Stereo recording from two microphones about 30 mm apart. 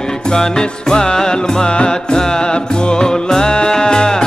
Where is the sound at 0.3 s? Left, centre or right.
Left.